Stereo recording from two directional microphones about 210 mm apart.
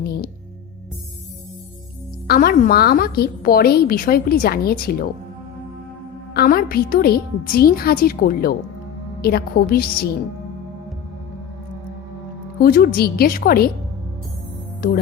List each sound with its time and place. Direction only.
0.0 s music: 45° left (ahead or behind)
2.2 s a woman's voice: 45° left (ahead or behind)
6.3 s a woman's voice: 45° left (ahead or behind)
12.6 s a woman's voice: 45° left (ahead or behind)